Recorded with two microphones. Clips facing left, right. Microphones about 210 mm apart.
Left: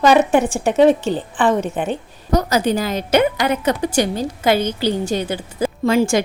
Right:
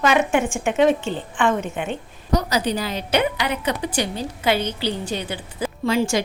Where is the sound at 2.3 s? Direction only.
45° left (ahead or behind).